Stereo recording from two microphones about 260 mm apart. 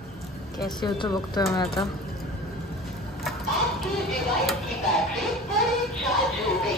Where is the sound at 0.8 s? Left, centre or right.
Centre.